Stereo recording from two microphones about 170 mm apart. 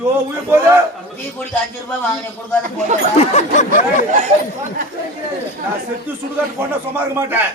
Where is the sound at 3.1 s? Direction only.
40° left (ahead or behind).